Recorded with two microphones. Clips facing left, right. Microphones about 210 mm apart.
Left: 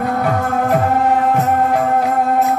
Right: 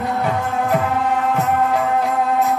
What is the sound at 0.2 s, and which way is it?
Music, 50° left (ahead or behind).